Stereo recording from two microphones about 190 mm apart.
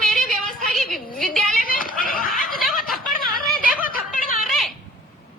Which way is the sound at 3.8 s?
45° left (ahead or behind).